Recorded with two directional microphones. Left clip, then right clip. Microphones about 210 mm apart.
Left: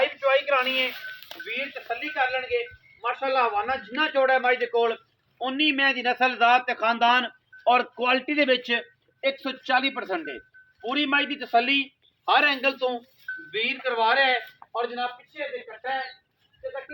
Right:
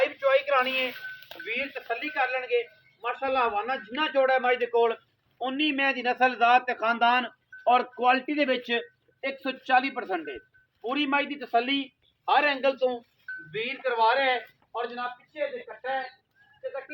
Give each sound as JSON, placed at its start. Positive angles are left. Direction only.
{"t": 0.0, "sound": "a sound", "side_deg": -50}
{"t": 1.5, "sound": "a man's voice", "side_deg": -25}
{"t": 13.5, "sound": "speech", "side_deg": 25}
{"t": 13.9, "sound": "speech", "side_deg": 15}